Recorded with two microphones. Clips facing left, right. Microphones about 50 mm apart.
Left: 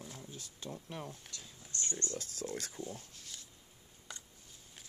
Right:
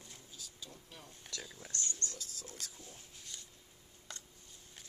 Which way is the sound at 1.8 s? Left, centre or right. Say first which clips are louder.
Left 10 dB; left.